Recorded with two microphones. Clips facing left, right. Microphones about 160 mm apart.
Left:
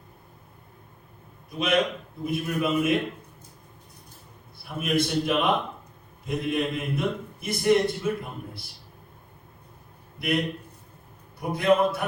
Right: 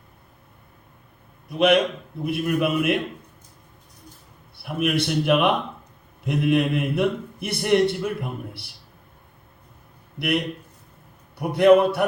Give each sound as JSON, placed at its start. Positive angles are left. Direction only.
{"t": 1.5, "sound": "a man's voice", "side_deg": -65}
{"t": 4.5, "sound": "a man's voice", "side_deg": -70}
{"t": 11.3, "sound": "a man's voice", "side_deg": -70}